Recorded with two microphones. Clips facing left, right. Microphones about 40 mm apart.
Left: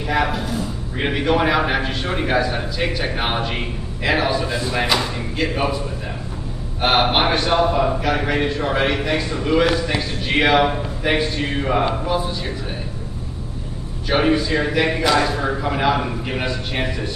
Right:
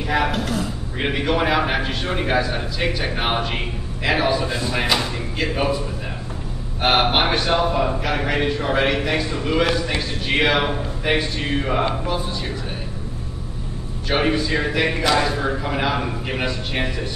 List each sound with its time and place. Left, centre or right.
0.0 s a man's voice: centre
0.3 s a man's voice: right
0.9 s a man's voice: centre
6.8 s a man's voice: centre
14.0 s a man's voice: centre